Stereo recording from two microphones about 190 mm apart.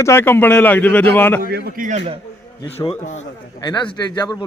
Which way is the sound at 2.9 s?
40° left (ahead or behind).